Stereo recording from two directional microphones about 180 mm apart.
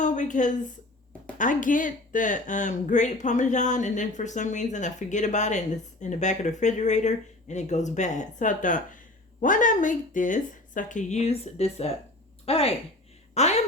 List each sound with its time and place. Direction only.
0.0 s a woman's voice: 45° left (ahead or behind)